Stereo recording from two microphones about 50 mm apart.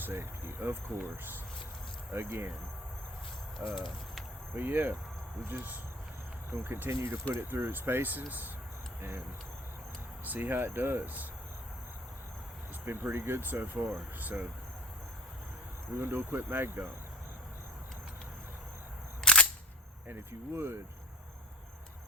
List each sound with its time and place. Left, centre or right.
0.0 s speech: right
3.6 s speech: right
4.5 s speech: right
6.5 s speech: right
7.7 s speech: right
9.0 s speech: right
10.2 s speech: right
12.8 s speech: right
16.0 s speech: right
19.2 s single-lens reflex camera: left
20.1 s speech: right